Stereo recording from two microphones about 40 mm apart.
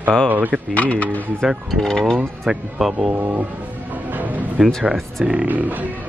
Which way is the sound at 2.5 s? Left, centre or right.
Centre.